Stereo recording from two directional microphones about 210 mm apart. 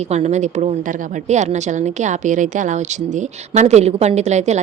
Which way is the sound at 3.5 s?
35° right (ahead or behind).